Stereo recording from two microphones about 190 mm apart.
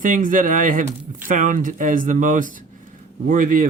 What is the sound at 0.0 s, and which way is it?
Speech, 45° right (ahead or behind).